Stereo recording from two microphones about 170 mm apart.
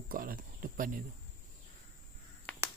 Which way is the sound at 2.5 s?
10° left (ahead or behind).